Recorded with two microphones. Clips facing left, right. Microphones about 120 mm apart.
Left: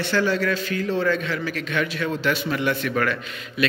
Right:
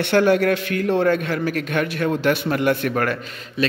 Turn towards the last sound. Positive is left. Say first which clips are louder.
# right 2 dB
turn(degrees=-40)  # may be behind; listen again after turning